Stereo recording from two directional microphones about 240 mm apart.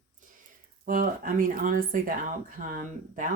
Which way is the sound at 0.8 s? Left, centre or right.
Right.